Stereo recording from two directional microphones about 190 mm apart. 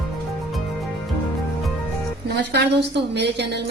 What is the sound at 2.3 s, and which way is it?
A woman's voice, 60° right (ahead or behind).